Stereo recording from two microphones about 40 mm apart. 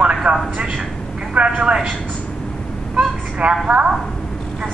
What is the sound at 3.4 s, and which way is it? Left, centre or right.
Speech, right.